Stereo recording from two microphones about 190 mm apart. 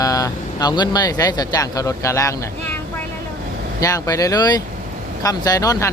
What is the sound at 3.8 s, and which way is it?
Speech, 15° left (ahead or behind).